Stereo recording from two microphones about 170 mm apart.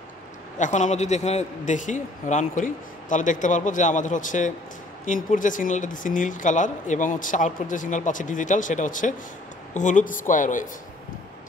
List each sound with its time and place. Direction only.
0.6 s speech: 45° left (ahead or behind)